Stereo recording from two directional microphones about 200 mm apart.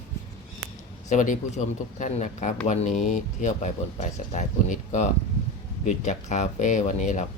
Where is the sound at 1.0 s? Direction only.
40° left (ahead or behind).